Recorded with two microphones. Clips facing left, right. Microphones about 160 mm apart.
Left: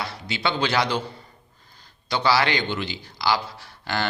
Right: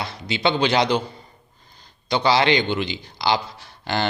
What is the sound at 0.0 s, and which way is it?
A man's voice, 20° right (ahead or behind).